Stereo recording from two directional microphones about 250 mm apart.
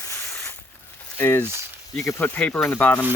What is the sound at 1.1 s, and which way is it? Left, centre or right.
Speech, centre.